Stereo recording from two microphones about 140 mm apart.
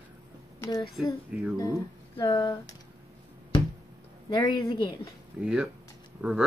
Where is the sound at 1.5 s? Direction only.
25° left (ahead or behind).